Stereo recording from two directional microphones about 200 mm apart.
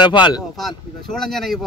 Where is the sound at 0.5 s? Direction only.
Centre (ahead or behind).